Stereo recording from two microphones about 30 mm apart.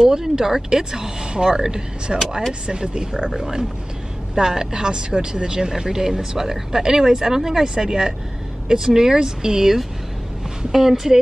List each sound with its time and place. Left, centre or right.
0.0 s speech: right
7.6 s speech: right
10.7 s speech: centre